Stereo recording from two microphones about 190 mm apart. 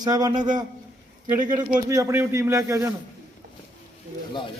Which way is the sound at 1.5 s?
15° right (ahead or behind).